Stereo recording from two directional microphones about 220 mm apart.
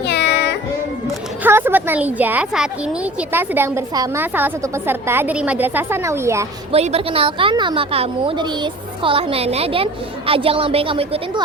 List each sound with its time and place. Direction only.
0.0 s child singing: 50° left (ahead or behind)
1.5 s a woman's voice: 10° right (ahead or behind)
6.7 s a woman's voice: 30° right (ahead or behind)